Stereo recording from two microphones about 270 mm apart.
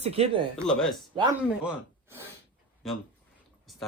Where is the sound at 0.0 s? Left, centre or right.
Right.